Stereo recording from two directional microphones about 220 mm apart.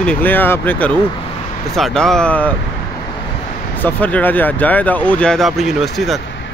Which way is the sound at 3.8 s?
10° left (ahead or behind).